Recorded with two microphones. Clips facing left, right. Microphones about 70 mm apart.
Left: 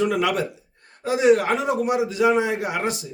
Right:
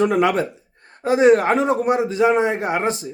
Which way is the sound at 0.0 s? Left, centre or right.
Right.